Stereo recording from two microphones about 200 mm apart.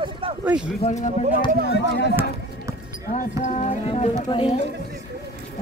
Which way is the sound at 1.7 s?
55° left (ahead or behind).